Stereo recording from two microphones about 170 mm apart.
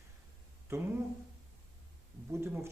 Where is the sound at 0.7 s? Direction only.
15° right (ahead or behind).